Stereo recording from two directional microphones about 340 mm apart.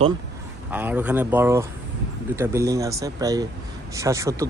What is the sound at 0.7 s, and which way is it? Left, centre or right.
Speech, centre.